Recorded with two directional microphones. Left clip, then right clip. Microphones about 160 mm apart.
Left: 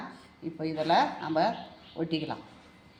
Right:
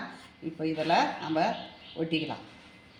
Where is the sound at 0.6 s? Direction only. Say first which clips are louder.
Even; 5° right (ahead or behind).